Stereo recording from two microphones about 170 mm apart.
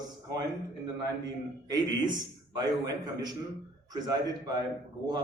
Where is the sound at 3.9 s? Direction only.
25° right (ahead or behind).